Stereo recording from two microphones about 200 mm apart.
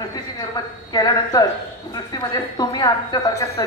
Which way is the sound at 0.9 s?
20° left (ahead or behind).